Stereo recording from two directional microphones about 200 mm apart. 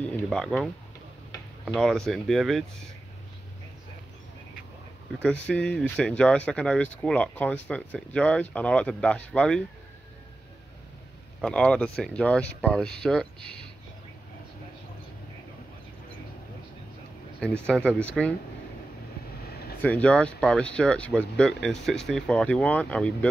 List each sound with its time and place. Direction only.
0.0 s speech: 5° left (ahead or behind)
1.7 s speech: centre (ahead or behind)
5.2 s speech: 5° left (ahead or behind)
11.4 s speech: 5° left (ahead or behind)
17.4 s speech: 5° left (ahead or behind)
19.5 s a sound: 50° left (ahead or behind)
19.8 s speech: 5° left (ahead or behind)